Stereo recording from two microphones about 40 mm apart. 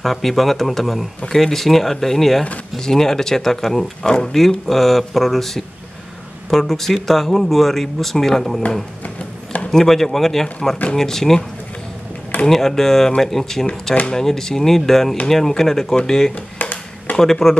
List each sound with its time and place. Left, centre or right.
0.0 s speech: centre
9.7 s speech: centre
12.4 s speech: centre
16.5 s a sound: left
17.2 s speech: centre